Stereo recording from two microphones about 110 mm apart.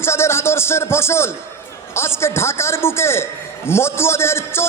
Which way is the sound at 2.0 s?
25° left (ahead or behind).